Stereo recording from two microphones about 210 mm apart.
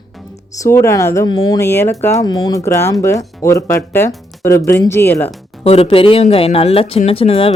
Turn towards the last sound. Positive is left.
turn(degrees=25)  # may be behind; listen again after turning